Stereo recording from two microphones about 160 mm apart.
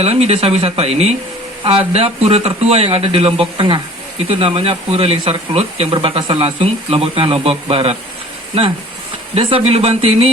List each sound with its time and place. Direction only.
0.0 s speech: 40° right (ahead or behind)
9.3 s speech: 40° right (ahead or behind)